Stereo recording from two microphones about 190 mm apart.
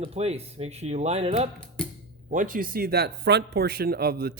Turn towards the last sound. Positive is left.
turn(degrees=-50)  # may be behind; listen again after turning